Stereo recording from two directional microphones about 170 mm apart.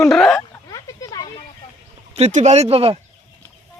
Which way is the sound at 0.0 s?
Centre (ahead or behind).